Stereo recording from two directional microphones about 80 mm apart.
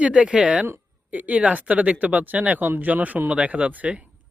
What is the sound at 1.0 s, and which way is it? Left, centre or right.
Speech, centre.